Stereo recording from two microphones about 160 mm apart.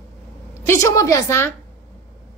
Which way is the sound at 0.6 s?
20° left (ahead or behind).